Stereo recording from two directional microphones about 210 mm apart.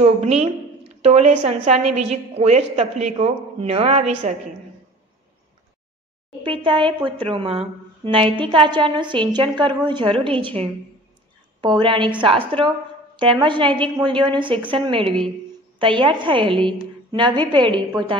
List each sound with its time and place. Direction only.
0.0 s a woman's voice: 30° right (ahead or behind)
6.4 s a woman's voice: 25° right (ahead or behind)